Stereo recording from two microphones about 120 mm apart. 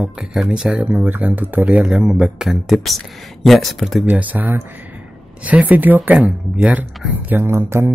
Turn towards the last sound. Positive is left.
turn(degrees=-20)  # may be behind; listen again after turning